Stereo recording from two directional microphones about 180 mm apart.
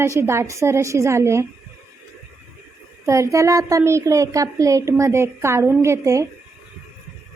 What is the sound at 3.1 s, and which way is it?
A woman's voice, 15° right (ahead or behind).